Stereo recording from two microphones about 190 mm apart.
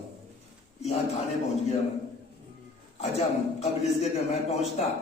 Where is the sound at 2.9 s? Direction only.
35° left (ahead or behind).